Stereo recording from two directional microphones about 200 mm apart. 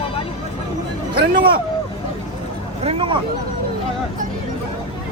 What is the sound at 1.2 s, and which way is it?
Speech, 50° right (ahead or behind).